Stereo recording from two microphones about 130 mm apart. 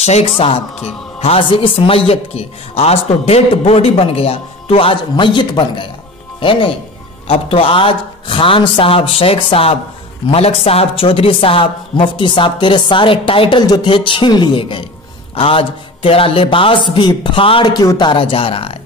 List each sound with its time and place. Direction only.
0.0 s a man's voice: 50° left (ahead or behind)